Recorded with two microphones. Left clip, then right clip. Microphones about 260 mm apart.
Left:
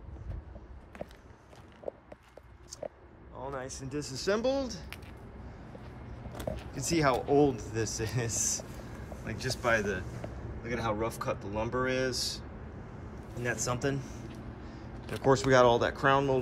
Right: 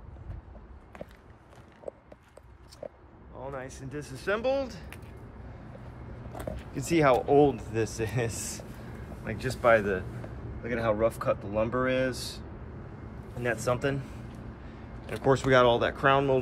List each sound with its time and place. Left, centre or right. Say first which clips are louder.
0.9 s walk: left 1 dB; centre
3.3 s speech: even; centre
6.3 s speech: right 1 dB; centre
15.0 s speech: right 1 dB; centre